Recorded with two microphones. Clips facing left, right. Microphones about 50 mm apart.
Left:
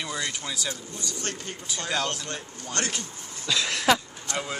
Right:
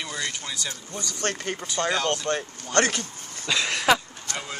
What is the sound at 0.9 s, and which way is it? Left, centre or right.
Speech, right.